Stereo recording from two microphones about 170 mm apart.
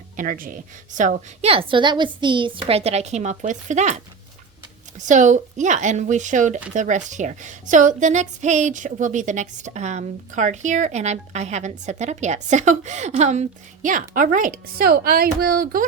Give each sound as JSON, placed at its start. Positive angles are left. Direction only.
{"t": 0.2, "sound": "a child's voice", "side_deg": -55}
{"t": 5.0, "sound": "speech", "side_deg": -45}